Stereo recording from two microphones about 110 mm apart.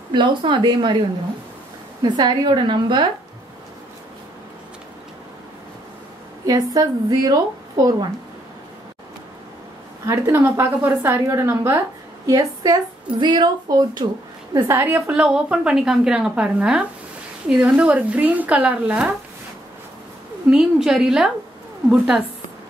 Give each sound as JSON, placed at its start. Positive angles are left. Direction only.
{"t": 0.1, "sound": "a woman's voice", "side_deg": -45}
{"t": 2.0, "sound": "a woman's voice", "side_deg": -40}
{"t": 6.4, "sound": "a woman's voice", "side_deg": -35}
{"t": 10.0, "sound": "a woman's voice", "side_deg": -25}
{"t": 14.5, "sound": "a woman's voice", "side_deg": -25}
{"t": 20.4, "sound": "a woman's voice", "side_deg": -5}